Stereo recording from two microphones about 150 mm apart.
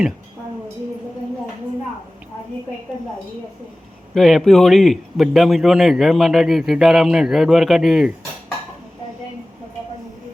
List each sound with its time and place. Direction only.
4.1 s a man's voice: centre (ahead or behind)